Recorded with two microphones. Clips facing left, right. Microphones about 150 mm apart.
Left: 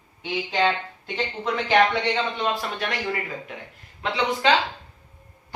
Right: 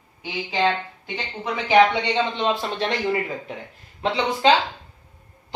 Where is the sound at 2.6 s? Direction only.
30° right (ahead or behind).